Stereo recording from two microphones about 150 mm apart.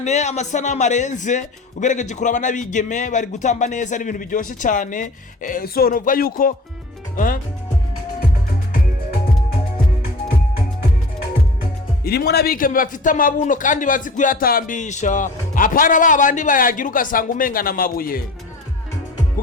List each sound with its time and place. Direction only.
0.0 s speech: 50° left (ahead or behind); by 6.5 s 70° left (ahead or behind)
12.0 s speech: 90° left; by 18.2 s 75° left (ahead or behind)